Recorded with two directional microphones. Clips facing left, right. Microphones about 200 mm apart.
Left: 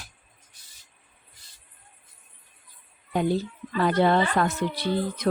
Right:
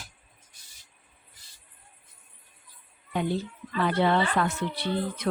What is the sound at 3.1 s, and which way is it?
Speech, 40° left (ahead or behind).